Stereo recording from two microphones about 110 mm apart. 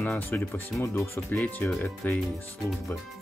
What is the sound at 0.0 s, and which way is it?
Speech, 15° left (ahead or behind).